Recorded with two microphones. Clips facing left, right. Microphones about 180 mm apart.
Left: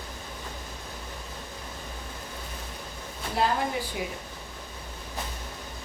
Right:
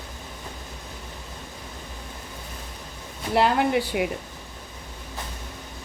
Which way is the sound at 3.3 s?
70° right (ahead or behind).